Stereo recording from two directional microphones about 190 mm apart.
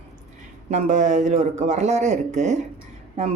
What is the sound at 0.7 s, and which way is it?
Speech, 40° right (ahead or behind).